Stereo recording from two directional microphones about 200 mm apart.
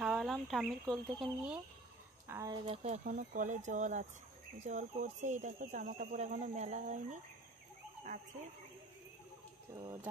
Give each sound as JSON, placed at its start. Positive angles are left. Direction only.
{"t": 0.0, "sound": "speech", "side_deg": 0}
{"t": 2.2, "sound": "speech", "side_deg": -15}
{"t": 2.6, "sound": "speech", "side_deg": -30}